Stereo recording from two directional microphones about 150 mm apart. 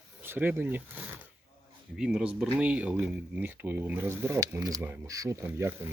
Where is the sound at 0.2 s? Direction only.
15° right (ahead or behind).